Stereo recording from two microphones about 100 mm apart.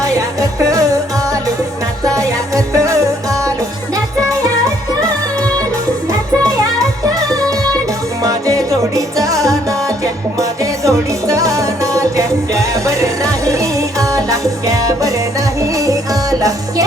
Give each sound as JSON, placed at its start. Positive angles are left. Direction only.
{"t": 0.0, "sound": "music", "side_deg": -35}